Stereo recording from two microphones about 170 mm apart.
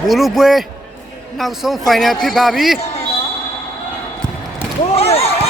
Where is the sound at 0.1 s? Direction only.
Centre (ahead or behind).